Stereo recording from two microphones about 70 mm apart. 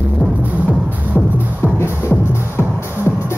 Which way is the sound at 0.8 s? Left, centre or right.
Left.